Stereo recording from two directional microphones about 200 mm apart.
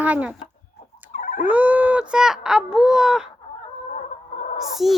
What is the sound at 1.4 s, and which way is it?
A child's voice, 10° right (ahead or behind).